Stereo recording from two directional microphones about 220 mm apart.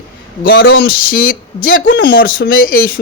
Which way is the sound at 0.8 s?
40° left (ahead or behind).